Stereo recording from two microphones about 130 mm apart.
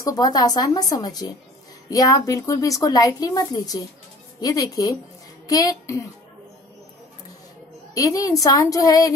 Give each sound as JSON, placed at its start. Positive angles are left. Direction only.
{"t": 0.0, "sound": "a woman's voice", "side_deg": 30}
{"t": 7.9, "sound": "a woman's voice", "side_deg": 25}